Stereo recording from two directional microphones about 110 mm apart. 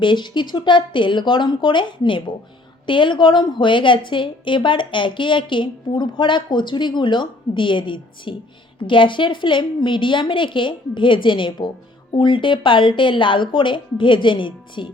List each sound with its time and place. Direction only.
0.0 s a woman's voice: 45° left (ahead or behind)